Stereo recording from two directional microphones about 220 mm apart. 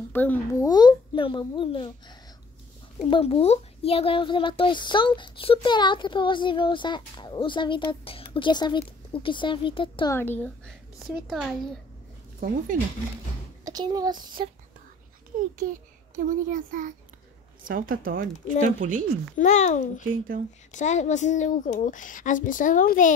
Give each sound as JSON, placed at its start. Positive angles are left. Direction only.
{"t": 0.1, "sound": "a child's voice", "side_deg": 10}
{"t": 0.7, "sound": "a child's voice", "side_deg": 20}
{"t": 10.1, "sound": "a woman's voice", "side_deg": 10}
{"t": 12.4, "sound": "a child's voice", "side_deg": -35}
{"t": 13.7, "sound": "a child's voice", "side_deg": -15}
{"t": 16.3, "sound": "a child's voice", "side_deg": -35}
{"t": 19.3, "sound": "speech", "side_deg": 30}